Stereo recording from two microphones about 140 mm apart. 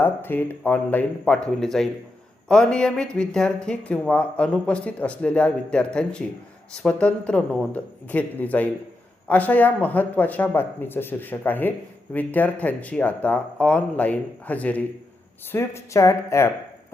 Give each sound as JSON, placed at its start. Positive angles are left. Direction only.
{"t": 0.0, "sound": "speech", "side_deg": 15}